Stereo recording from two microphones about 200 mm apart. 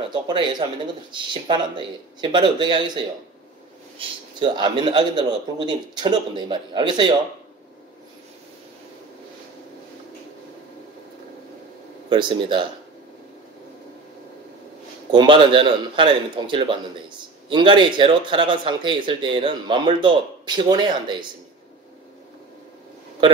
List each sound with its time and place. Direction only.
0.1 s speech: 25° right (ahead or behind)
4.0 s speech: 25° right (ahead or behind)
12.1 s speech: 25° right (ahead or behind)
15.0 s speech: 25° right (ahead or behind)